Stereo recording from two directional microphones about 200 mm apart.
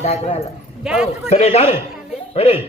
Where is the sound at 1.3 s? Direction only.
30° left (ahead or behind).